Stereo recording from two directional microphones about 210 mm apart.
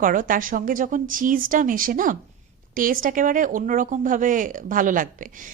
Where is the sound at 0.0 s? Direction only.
40° right (ahead or behind).